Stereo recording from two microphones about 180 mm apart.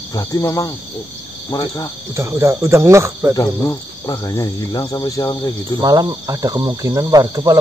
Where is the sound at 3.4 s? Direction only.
20° left (ahead or behind).